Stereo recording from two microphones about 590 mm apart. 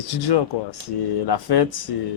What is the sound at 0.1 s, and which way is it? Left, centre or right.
A man's voice, left.